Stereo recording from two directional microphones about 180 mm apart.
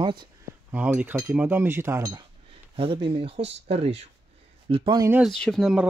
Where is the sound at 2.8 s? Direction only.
30° right (ahead or behind).